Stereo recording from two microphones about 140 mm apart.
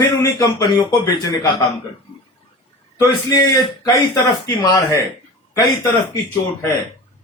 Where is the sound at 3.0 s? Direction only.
30° left (ahead or behind).